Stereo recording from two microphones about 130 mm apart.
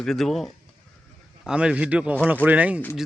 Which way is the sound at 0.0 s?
5° left (ahead or behind).